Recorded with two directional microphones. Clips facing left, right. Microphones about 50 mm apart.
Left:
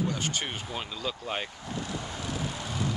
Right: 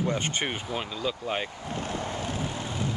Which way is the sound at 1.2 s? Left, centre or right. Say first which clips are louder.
Right 3 dB; centre.